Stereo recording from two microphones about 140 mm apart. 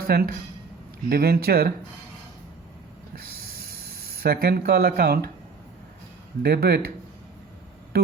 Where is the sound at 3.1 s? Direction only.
90° right.